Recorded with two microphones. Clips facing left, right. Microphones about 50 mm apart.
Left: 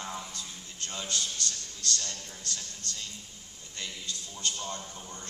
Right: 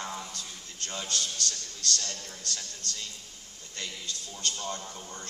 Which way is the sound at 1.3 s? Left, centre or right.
Left.